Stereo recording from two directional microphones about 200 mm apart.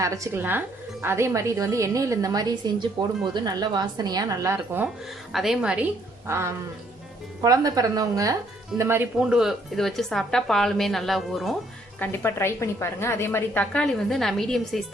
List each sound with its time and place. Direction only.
0.0 s a woman's voice: 15° right (ahead or behind)
5.3 s a woman's voice: centre (ahead or behind)
11.9 s a woman's voice: 10° left (ahead or behind)